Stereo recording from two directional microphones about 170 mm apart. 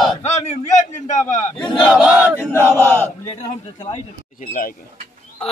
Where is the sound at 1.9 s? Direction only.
5° right (ahead or behind).